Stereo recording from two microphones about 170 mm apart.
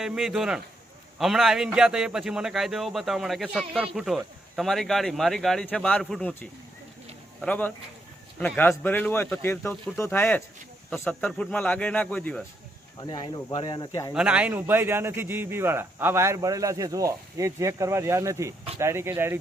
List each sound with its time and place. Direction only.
0.0 s a man's voice: centre (ahead or behind)
13.0 s speech: 25° left (ahead or behind)
14.1 s a man's voice: 5° right (ahead or behind)